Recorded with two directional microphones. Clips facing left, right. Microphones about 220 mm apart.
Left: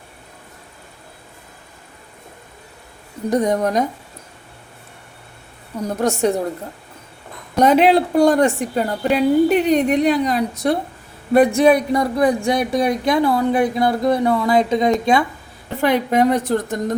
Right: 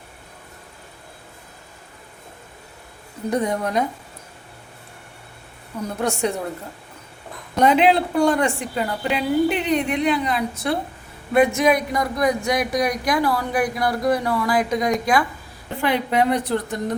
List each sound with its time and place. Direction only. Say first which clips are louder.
3.2 s a woman's voice: left 5 dB; 40° left (ahead or behind)
5.9 s a woman's voice: left 5 dB; 45° left (ahead or behind)
7.6 s a woman's voice: left 3 dB; 45° left (ahead or behind); by 15.2 s 25° left (ahead or behind)
15.8 s a woman's voice: left 4 dB; 45° left (ahead or behind)